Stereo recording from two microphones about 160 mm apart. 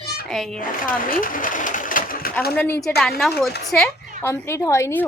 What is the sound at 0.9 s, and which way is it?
Speech, 60° left (ahead or behind).